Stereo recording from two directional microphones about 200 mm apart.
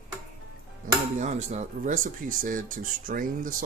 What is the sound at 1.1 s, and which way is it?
Speech, 35° right (ahead or behind).